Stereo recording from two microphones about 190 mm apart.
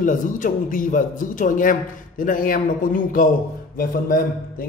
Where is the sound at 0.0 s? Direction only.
45° left (ahead or behind).